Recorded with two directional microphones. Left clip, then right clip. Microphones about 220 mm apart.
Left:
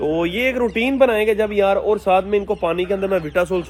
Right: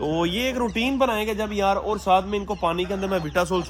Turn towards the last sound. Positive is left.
turn(degrees=-15)  # may be behind; listen again after turning